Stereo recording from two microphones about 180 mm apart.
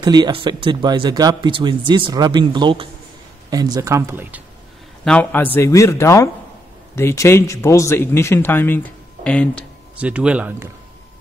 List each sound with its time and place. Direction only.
0.0 s speech: 25° right (ahead or behind)
5.0 s speech: 10° left (ahead or behind)
9.9 s speech: 5° right (ahead or behind)